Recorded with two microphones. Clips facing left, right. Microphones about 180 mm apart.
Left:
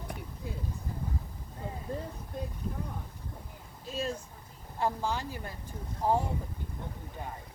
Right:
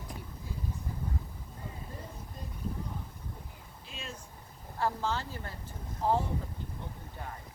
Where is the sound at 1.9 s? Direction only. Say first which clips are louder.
Left 9 dB; 65° left (ahead or behind).